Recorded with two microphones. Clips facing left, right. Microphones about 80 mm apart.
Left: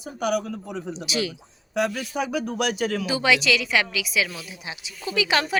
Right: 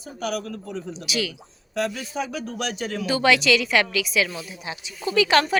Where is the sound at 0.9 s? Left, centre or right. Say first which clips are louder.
Left 1 dB; left.